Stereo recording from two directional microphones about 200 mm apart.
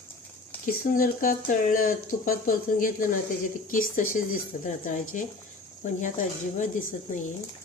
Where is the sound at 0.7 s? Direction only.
45° left (ahead or behind).